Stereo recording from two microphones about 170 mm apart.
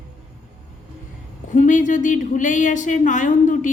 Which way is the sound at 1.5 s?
50° left (ahead or behind).